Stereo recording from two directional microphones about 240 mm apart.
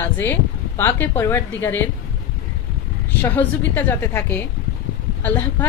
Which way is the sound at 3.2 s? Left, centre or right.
Centre.